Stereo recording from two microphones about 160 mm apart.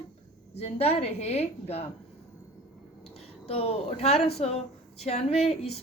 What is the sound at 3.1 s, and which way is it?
Speech, 40° left (ahead or behind).